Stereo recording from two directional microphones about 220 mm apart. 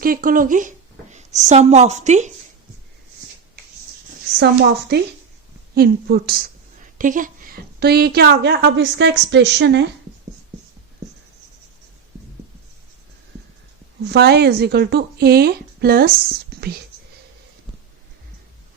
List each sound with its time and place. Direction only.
0.0 s speech: 40° right (ahead or behind)
4.9 s a woman's voice: 50° right (ahead or behind)
14.0 s a woman's voice: 50° right (ahead or behind)